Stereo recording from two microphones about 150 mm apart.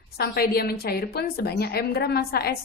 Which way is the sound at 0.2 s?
90° left.